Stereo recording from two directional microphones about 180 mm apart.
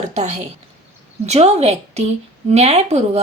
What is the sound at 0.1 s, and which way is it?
A woman's voice, 40° right (ahead or behind).